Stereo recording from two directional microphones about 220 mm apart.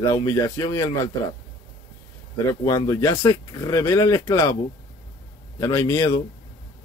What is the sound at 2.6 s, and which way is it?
Speech, 15° left (ahead or behind).